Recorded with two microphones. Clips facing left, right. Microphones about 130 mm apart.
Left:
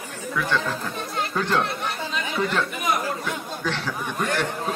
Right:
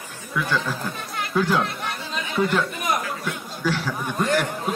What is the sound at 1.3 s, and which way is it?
Speech, 5° right (ahead or behind).